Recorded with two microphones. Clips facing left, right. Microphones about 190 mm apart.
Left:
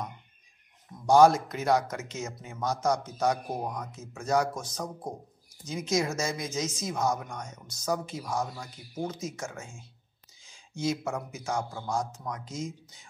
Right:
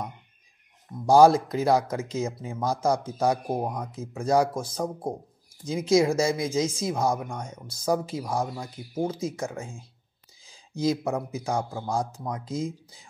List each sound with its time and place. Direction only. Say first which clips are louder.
1.0 s speech: right 3 dB; 35° right (ahead or behind)